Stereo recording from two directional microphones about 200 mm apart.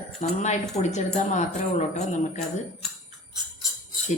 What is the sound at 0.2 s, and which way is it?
A woman's voice, 35° left (ahead or behind).